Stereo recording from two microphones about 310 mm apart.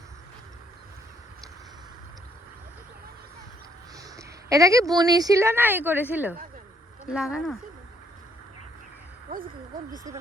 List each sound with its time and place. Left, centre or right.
3.9 s a woman's voice: centre
9.3 s speech: right